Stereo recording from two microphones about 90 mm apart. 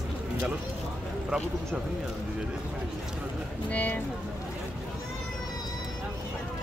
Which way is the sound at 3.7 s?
20° left (ahead or behind).